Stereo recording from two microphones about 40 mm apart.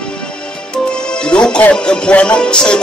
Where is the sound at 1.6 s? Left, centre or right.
Left.